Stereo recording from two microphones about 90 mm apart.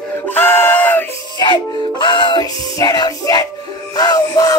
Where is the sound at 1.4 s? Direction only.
55° left (ahead or behind).